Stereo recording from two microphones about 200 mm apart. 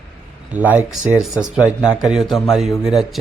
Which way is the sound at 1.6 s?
15° left (ahead or behind).